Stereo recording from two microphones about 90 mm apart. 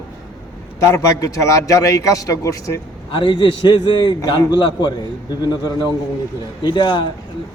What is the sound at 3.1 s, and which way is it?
A man's voice, 65° left (ahead or behind).